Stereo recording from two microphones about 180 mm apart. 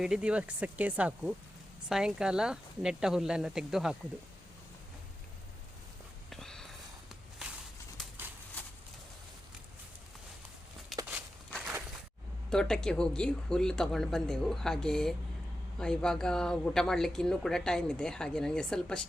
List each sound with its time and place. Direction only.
0.0 s speech: 5° right (ahead or behind)
6.3 s walk: 5° left (ahead or behind)
8.6 s a sound: 10° left (ahead or behind)
10.9 s walk: centre (ahead or behind)
12.5 s speech: 5° left (ahead or behind)